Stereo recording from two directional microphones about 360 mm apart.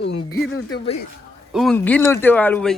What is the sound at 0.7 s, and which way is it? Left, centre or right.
Speech, centre.